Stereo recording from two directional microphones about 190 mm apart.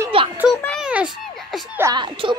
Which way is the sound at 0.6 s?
5° left (ahead or behind).